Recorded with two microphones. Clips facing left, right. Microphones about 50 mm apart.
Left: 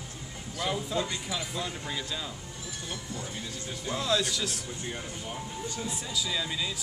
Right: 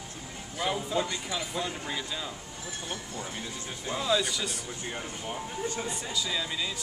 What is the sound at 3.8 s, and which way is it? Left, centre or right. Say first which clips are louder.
Speech: right 1 dB; centre.